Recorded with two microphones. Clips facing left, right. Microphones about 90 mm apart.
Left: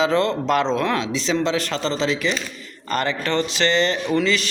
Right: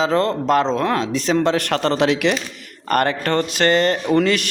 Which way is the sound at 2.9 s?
55° right (ahead or behind).